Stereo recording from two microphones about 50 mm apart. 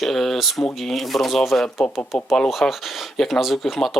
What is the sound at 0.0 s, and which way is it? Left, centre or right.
Speech, centre.